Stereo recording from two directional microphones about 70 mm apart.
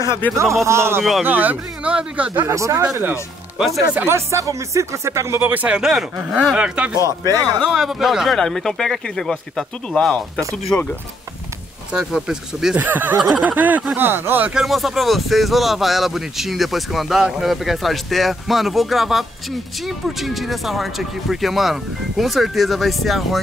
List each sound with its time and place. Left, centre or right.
0.4 s speech: right
1.2 s speech: right
2.4 s speech: right
3.5 s speech: centre
4.0 s speech: right
5.4 s speech: right
5.8 s speech: centre
7.0 s speech: right
7.7 s speech: centre
11.9 s speech: centre
12.7 s speech: right
14.5 s speech: centre